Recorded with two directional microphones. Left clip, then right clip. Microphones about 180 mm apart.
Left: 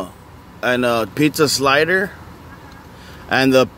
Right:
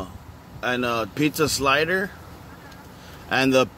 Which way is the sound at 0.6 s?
20° left (ahead or behind).